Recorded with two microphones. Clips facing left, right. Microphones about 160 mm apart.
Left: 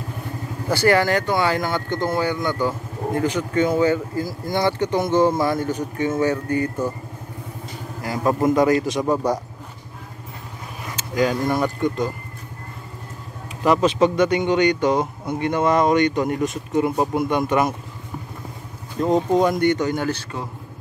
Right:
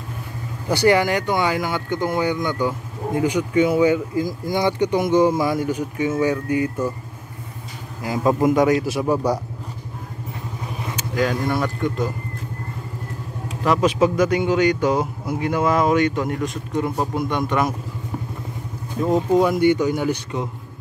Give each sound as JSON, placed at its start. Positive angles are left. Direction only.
{"t": 0.7, "sound": "speech", "side_deg": -15}
{"t": 8.0, "sound": "speech", "side_deg": -20}
{"t": 8.5, "sound": "speech", "side_deg": -5}
{"t": 11.1, "sound": "a man's voice", "side_deg": 0}
{"t": 13.7, "sound": "a man's voice", "side_deg": -10}
{"t": 19.0, "sound": "speech", "side_deg": -5}